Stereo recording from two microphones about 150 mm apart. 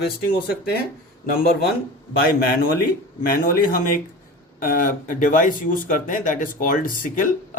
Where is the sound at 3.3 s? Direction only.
70° left (ahead or behind).